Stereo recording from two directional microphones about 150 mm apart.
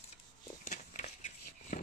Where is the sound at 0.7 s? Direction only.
55° left (ahead or behind).